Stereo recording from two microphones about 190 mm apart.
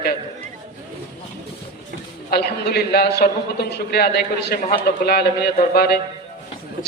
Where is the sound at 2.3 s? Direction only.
55° left (ahead or behind).